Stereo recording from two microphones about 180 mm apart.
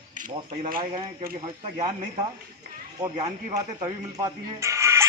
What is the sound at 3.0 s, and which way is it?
Speech, 25° right (ahead or behind).